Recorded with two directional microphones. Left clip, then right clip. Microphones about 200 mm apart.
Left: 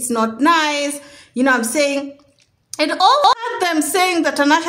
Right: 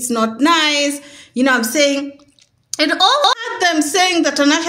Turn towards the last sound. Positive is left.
turn(degrees=-5)  # may be behind; listen again after turning